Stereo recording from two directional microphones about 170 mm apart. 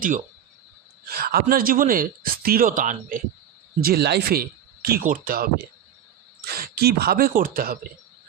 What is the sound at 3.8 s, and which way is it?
Speech, 65° right (ahead or behind).